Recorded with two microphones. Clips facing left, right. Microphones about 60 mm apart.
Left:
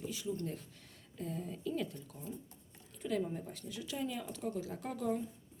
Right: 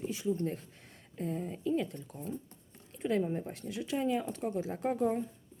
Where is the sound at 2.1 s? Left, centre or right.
Right.